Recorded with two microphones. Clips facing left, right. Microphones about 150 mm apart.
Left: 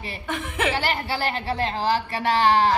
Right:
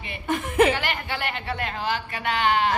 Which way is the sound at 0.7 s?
35° left (ahead or behind).